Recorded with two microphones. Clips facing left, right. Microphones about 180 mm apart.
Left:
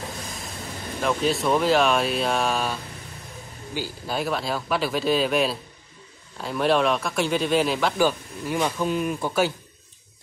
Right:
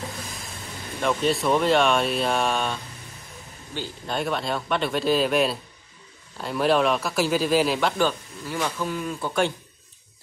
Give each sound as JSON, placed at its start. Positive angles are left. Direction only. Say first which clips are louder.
{"t": 1.0, "sound": "speech", "louder": "even", "side_deg": 0}
{"t": 8.5, "sound": "speech", "louder": "left 3 dB", "side_deg": 15}